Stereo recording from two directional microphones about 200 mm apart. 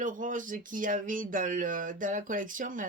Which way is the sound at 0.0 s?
40° right (ahead or behind).